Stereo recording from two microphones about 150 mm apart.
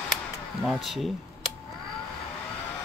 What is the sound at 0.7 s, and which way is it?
Speech, centre (ahead or behind).